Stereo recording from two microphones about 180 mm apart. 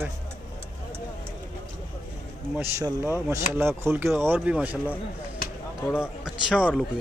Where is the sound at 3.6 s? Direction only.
15° right (ahead or behind).